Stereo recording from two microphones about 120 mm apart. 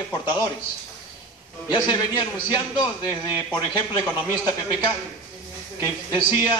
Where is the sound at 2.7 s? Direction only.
35° left (ahead or behind).